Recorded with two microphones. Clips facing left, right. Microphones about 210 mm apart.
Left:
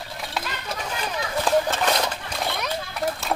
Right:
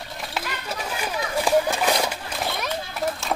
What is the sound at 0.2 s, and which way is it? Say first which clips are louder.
Run: even; 5° right (ahead or behind).